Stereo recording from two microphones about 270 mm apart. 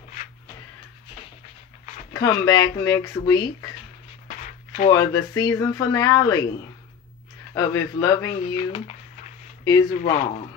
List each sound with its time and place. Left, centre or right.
2.1 s speech: centre
4.4 s a sound: left
4.9 s speech: centre
7.5 s speech: centre